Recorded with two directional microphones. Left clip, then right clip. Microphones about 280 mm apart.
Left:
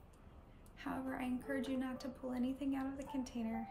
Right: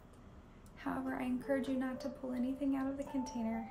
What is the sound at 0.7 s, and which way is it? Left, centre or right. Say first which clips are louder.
A woman's voice: right 3 dB; centre.